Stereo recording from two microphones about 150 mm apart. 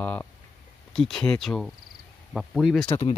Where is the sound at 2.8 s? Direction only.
40° left (ahead or behind).